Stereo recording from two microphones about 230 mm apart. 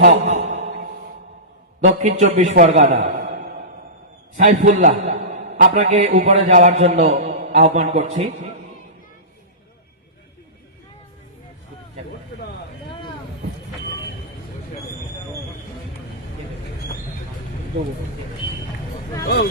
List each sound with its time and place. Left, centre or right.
0.0 s a sound: right
2.0 s a man's voice: right
4.4 s a man's voice: right